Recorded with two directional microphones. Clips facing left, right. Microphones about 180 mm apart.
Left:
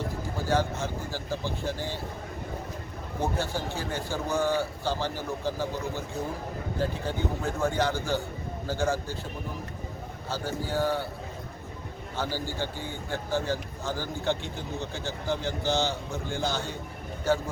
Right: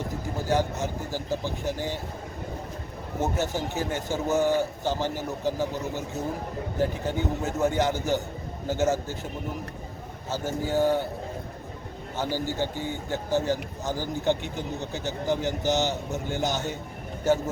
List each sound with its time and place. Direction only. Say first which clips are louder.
0.3 s speech: right 2 dB; 15° right (ahead or behind)
3.2 s speech: right 2 dB; 20° right (ahead or behind)
10.2 s speech: right 3 dB; 20° right (ahead or behind)
12.1 s a man's voice: right 3 dB; 15° right (ahead or behind)